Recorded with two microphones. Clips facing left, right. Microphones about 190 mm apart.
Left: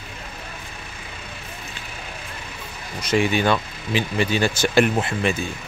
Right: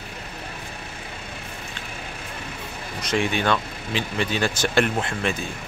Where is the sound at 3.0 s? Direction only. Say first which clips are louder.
Left 4 dB; centre (ahead or behind).